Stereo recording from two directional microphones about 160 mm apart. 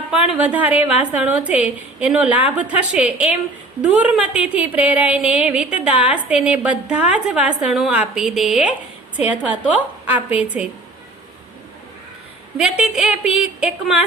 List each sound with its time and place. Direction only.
0.3 s a woman's voice: 10° right (ahead or behind)
12.5 s a woman's voice: 5° right (ahead or behind)